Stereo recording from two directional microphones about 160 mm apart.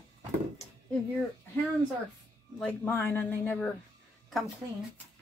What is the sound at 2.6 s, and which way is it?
Speech, 10° left (ahead or behind).